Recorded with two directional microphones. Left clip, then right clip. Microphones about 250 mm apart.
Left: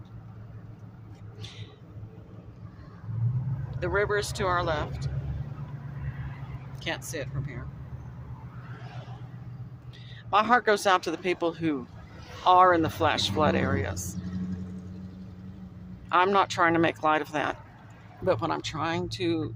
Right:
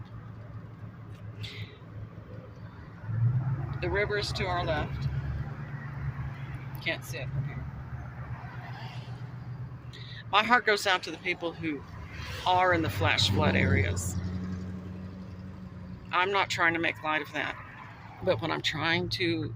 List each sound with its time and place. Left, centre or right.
1.4 s vehicle: centre
3.7 s speech: centre
6.7 s speech: centre
10.2 s speech: centre
16.0 s speech: centre